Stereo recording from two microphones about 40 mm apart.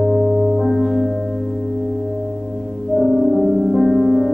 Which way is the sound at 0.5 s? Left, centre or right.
Centre.